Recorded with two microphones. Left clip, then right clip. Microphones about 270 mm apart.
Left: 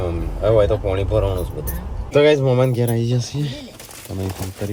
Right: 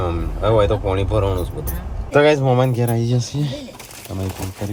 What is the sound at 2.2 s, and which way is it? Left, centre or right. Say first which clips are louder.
Speech: left 1 dB; centre.